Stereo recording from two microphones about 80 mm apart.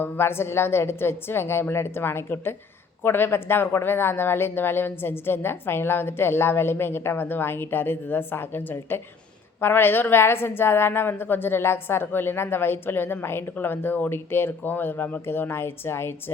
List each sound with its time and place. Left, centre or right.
0.0 s a woman's voice: left